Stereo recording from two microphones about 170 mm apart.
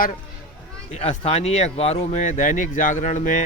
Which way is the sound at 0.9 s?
40° left (ahead or behind).